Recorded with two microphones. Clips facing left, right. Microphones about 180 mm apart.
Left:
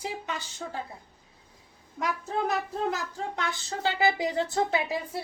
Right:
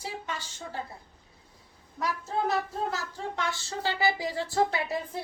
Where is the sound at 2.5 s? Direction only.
15° left (ahead or behind).